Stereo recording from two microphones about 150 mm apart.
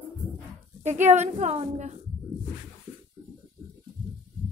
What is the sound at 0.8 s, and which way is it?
A woman's voice, 50° right (ahead or behind).